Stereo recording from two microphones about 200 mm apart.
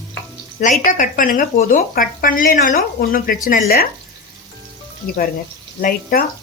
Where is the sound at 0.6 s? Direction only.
40° left (ahead or behind).